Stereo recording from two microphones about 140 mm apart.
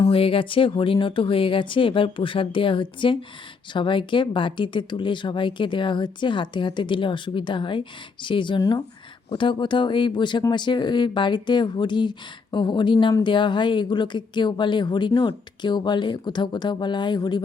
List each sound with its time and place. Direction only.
0.1 s speech: 40° left (ahead or behind)